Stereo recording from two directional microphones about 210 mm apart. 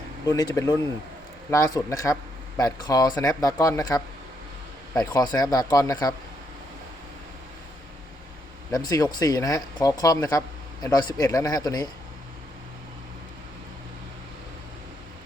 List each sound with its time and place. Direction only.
0.3 s speech: 15° left (ahead or behind)
8.7 s speech: 15° left (ahead or behind)